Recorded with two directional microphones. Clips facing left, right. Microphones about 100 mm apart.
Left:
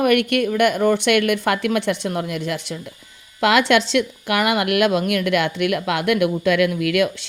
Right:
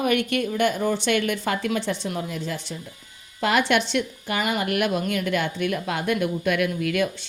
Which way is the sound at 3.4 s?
90° left.